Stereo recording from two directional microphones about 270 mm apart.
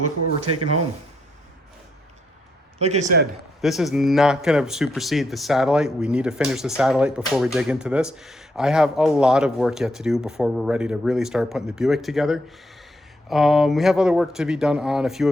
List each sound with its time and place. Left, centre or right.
2.7 s speech: right
3.6 s speech: centre